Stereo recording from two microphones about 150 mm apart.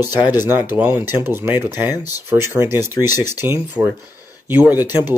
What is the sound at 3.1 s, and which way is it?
Speech, 25° left (ahead or behind).